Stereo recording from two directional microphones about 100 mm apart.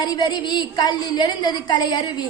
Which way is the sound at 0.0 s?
45° left (ahead or behind).